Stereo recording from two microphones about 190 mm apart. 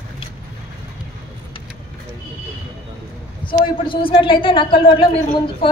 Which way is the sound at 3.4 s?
25° left (ahead or behind).